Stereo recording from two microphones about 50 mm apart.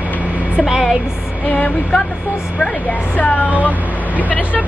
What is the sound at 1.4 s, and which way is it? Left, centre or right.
Speech, left.